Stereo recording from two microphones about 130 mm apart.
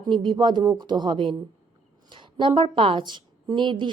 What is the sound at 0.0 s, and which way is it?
A woman's voice, 35° right (ahead or behind).